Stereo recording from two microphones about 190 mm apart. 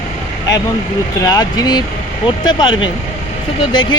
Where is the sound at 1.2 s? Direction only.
20° left (ahead or behind).